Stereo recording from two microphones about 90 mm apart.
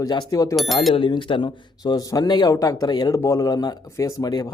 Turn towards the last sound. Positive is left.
turn(degrees=50)  # may be behind; listen again after turning